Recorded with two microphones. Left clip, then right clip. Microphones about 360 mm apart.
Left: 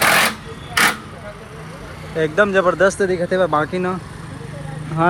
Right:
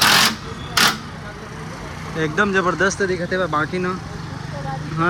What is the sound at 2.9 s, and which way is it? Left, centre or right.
Speech, left.